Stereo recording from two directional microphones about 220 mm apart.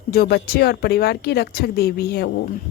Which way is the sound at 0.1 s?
45° left (ahead or behind).